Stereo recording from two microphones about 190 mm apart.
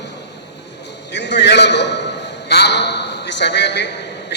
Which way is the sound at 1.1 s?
65° left (ahead or behind).